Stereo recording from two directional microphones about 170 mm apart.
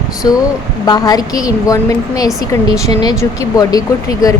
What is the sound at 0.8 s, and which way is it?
Speech, 20° left (ahead or behind).